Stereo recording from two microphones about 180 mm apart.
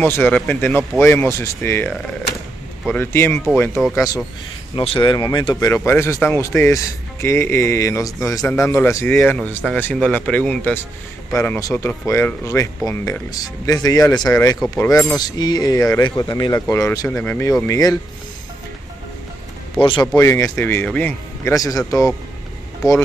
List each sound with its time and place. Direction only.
0.0 s speech: 10° left (ahead or behind)
19.8 s speech: 25° left (ahead or behind)
20.2 s speech: 15° left (ahead or behind)